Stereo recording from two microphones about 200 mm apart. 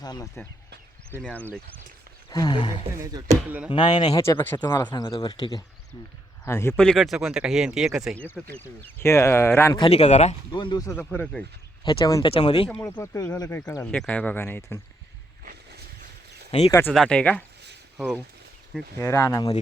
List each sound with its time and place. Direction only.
0.0 s speech: 20° left (ahead or behind)
2.3 s speech: 20° left (ahead or behind)
3.0 s speech: 20° right (ahead or behind)
3.7 s speech: 20° left (ahead or behind)
4.6 s speech: 20° left (ahead or behind)
9.7 s speech: 25° left (ahead or behind)
10.5 s speech: 25° left (ahead or behind); by 11.4 s 5° left (ahead or behind)
11.9 s speech: 20° left (ahead or behind)
12.8 s speech: 15° left (ahead or behind)
13.9 s speech: 5° left (ahead or behind)
16.5 s speech: 30° left (ahead or behind)
16.9 s speech: 5° left (ahead or behind)
17.9 s speech: 5° right (ahead or behind)
18.9 s speech: 15° left (ahead or behind)